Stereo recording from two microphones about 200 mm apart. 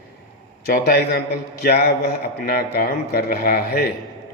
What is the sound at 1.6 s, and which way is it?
A man's voice, 50° left (ahead or behind).